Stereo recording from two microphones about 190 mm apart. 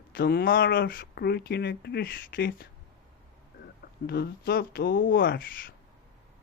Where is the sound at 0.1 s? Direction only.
55° left (ahead or behind).